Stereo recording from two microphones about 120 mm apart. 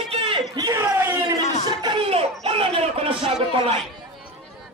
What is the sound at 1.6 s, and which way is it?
Music, 35° right (ahead or behind).